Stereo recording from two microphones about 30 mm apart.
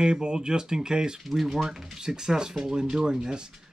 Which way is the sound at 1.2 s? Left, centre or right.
Centre.